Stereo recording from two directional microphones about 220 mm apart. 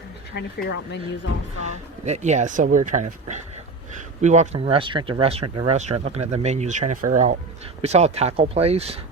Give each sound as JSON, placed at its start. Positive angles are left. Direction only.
{"t": 0.3, "sound": "speech", "side_deg": 50}
{"t": 1.6, "sound": "speech", "side_deg": -30}